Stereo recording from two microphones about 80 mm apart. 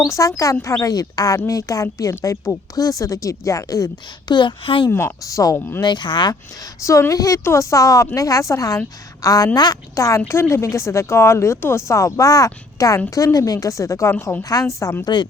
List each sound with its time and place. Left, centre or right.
0.1 s speech: left
4.3 s speech: left
4.9 s speech: left
5.2 s speech: left
5.5 s speech: left
5.8 s speech: left
7.1 s speech: left
14.4 s speech: left
15.0 s speech: left